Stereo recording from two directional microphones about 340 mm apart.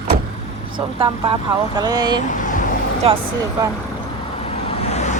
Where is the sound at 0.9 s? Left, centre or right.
Centre.